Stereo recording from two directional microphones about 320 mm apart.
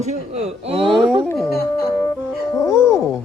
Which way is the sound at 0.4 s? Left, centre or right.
Centre.